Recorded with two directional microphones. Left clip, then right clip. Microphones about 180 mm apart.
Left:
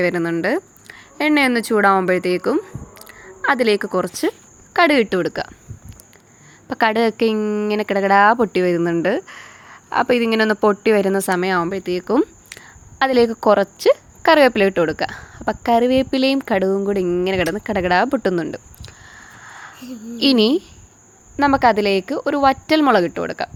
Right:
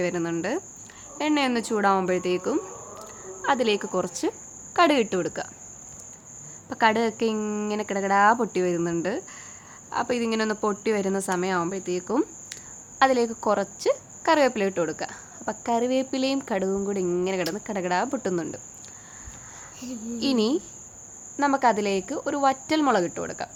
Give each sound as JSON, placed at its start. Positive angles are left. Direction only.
{"t": 0.0, "sound": "a woman's voice", "side_deg": 30}
{"t": 6.7, "sound": "a woman's voice", "side_deg": 35}
{"t": 7.8, "sound": "a woman's voice", "side_deg": 35}
{"t": 19.5, "sound": "a sound", "side_deg": 35}
{"t": 19.8, "sound": "speech", "side_deg": 0}
{"t": 20.1, "sound": "a woman's voice", "side_deg": 35}